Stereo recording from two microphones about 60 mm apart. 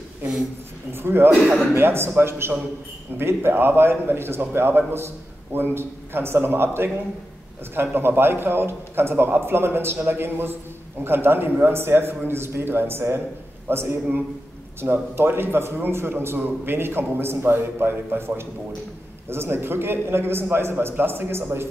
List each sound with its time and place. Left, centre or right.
0.9 s a man's voice: right